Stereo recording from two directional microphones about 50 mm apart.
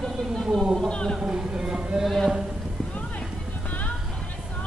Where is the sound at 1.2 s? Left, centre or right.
Centre.